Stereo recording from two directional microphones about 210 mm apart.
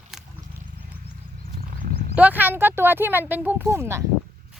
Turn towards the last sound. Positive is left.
turn(degrees=-15)  # may be behind; listen again after turning